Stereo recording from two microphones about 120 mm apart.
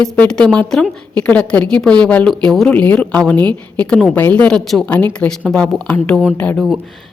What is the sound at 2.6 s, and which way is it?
A woman's voice, 10° left (ahead or behind).